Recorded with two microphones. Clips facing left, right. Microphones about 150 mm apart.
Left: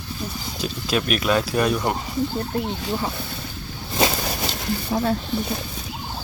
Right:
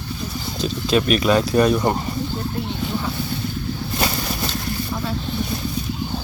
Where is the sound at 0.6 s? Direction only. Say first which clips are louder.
Right 5 dB; 5° left (ahead or behind).